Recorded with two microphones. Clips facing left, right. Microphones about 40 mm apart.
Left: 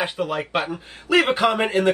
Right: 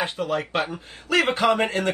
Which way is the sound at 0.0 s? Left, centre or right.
Centre.